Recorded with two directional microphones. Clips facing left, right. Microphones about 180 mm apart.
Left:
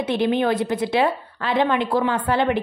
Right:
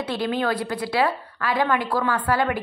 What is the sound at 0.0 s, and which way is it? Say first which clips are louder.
A woman's voice: left 4 dB; 20° left (ahead or behind).